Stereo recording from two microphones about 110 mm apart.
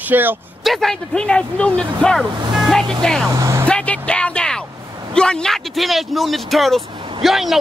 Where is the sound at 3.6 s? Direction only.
10° left (ahead or behind).